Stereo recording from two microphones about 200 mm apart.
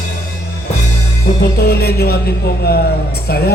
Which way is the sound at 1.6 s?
50° left (ahead or behind).